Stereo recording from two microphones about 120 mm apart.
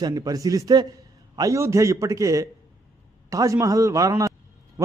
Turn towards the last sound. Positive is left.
turn(degrees=-25)  # may be behind; listen again after turning